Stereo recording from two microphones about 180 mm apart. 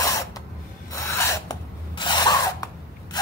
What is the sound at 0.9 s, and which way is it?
Filing, 15° left (ahead or behind).